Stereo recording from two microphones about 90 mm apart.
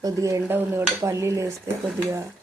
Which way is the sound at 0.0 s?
35° right (ahead or behind).